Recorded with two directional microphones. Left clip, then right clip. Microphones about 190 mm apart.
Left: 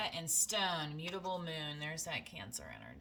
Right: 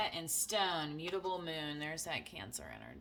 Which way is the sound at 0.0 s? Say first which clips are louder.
Even; 25° right (ahead or behind).